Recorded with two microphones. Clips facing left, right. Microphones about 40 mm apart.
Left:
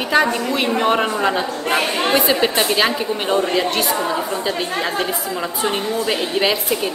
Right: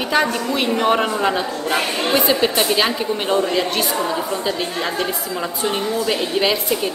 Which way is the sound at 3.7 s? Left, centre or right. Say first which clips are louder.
Left 1 dB; centre.